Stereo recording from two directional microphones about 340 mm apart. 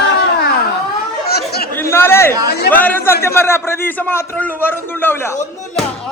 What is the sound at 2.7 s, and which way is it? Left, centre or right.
A man's voice, centre.